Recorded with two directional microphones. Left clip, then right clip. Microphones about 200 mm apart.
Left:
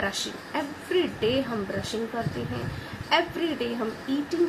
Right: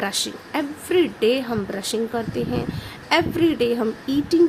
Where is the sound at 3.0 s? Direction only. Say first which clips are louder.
Right 6 dB; 60° right (ahead or behind).